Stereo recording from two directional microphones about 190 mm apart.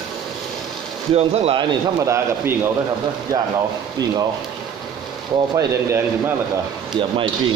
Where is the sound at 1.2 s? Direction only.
30° right (ahead or behind).